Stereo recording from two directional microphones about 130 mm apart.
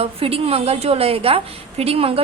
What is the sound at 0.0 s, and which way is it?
A woman's voice, 45° right (ahead or behind).